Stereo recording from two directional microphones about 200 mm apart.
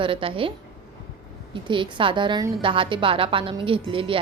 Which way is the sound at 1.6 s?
25° right (ahead or behind).